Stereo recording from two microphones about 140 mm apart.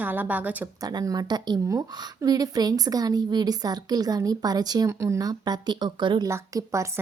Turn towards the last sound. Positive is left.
turn(degrees=-20)  # may be behind; listen again after turning